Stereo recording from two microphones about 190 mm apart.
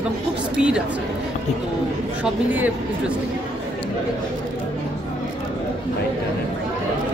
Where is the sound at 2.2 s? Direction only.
10° right (ahead or behind).